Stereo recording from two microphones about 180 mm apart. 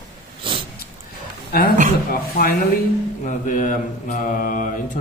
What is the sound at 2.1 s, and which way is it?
Speech, 55° left (ahead or behind).